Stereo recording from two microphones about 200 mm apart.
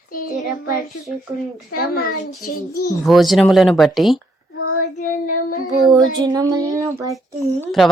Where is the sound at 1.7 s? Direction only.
50° left (ahead or behind).